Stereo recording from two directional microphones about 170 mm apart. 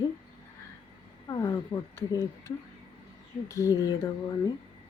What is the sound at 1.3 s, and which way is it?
Speech, 20° left (ahead or behind).